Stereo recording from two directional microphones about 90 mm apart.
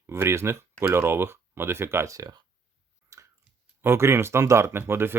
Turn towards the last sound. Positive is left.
turn(degrees=-25)  # may be behind; listen again after turning